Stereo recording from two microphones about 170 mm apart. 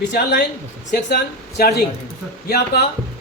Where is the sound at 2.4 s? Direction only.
70° left (ahead or behind).